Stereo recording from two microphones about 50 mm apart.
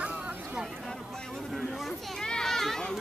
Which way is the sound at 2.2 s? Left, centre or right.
Centre.